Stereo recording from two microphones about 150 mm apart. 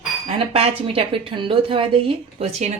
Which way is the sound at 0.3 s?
40° right (ahead or behind).